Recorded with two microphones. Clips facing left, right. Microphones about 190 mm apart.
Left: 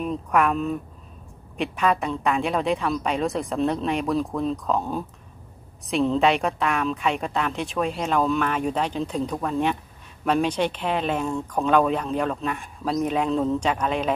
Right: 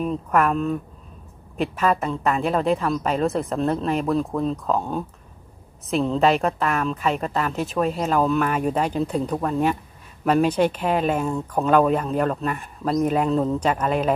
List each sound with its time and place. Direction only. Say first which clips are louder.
0.0 s speech: right 1 dB; centre (ahead or behind)